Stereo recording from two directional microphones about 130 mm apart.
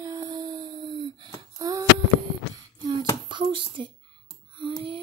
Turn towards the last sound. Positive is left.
turn(degrees=-40)  # may be behind; listen again after turning